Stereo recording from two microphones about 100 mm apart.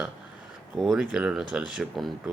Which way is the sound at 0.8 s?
5° right (ahead or behind).